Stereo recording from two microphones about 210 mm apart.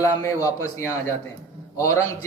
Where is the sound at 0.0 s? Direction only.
15° left (ahead or behind).